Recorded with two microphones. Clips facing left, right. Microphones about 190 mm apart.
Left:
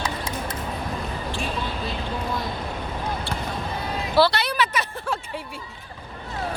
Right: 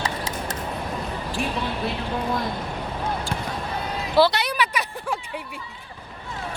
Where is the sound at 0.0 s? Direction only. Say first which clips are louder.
Even; 75° right (ahead or behind).